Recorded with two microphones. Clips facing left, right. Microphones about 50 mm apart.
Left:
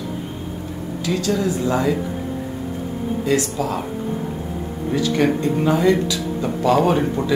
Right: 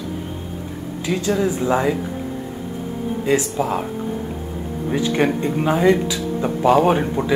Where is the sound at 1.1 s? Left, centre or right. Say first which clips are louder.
Right 1 dB; right.